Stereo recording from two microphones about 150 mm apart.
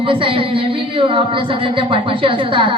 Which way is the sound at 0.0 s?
35° right (ahead or behind).